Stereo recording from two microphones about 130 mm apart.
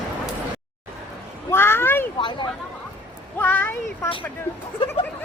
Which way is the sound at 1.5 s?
20° left (ahead or behind).